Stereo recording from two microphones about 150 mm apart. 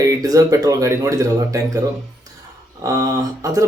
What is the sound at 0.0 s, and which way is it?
Speech, 25° right (ahead or behind).